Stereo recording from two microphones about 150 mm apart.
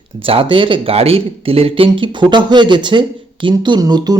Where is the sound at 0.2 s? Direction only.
35° right (ahead or behind).